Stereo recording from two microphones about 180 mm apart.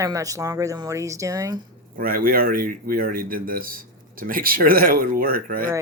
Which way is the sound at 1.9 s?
55° right (ahead or behind).